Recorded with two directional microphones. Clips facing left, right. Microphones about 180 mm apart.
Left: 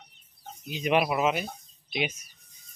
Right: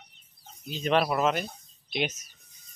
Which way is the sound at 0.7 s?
10° left (ahead or behind).